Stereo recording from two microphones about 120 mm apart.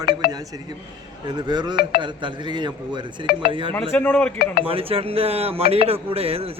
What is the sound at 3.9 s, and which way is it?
Speech, 15° left (ahead or behind).